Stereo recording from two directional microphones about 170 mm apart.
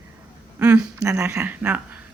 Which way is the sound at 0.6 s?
10° right (ahead or behind).